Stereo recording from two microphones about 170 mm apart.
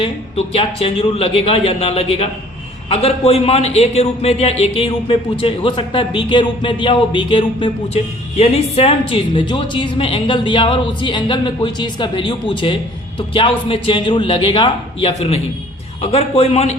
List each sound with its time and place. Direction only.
0.0 s a woman's voice: 30° left (ahead or behind)